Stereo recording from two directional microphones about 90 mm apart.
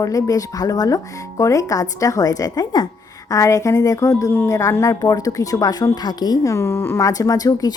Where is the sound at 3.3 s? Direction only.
35° left (ahead or behind).